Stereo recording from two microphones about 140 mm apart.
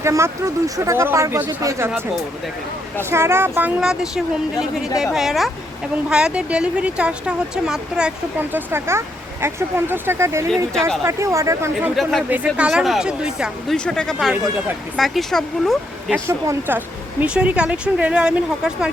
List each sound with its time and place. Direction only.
0.0 s speech: 20° right (ahead or behind)
3.0 s speech: 15° right (ahead or behind)
3.8 s speech: 5° right (ahead or behind); by 10.4 s 20° right (ahead or behind)
10.5 s speech: 5° left (ahead or behind)
11.0 s speech: 20° right (ahead or behind)
12.3 s speech: 10° right (ahead or behind)
13.7 s speech: 5° left (ahead or behind)
16.2 s speech: 20° right (ahead or behind)